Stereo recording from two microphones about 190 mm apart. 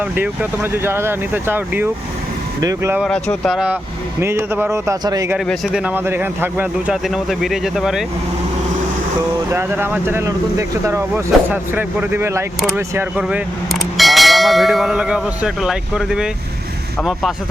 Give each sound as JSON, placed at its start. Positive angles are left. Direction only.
{"t": 0.0, "sound": "speech", "side_deg": -10}
{"t": 3.0, "sound": "speech", "side_deg": 5}
{"t": 4.2, "sound": "speech", "side_deg": -15}
{"t": 5.5, "sound": "speech", "side_deg": -5}
{"t": 9.5, "sound": "speech", "side_deg": -10}